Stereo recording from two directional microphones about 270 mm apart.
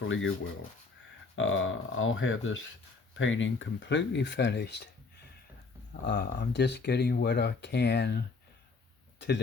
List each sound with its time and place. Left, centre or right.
0.1 s speech: left
1.4 s speech: left